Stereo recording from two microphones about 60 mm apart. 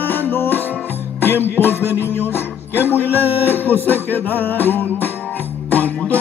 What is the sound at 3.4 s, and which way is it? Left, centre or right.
Music, left.